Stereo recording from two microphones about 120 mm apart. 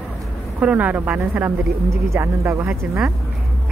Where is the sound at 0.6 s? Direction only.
10° right (ahead or behind).